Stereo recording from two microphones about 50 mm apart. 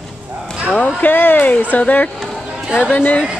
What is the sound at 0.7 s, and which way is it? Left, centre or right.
Speech, left.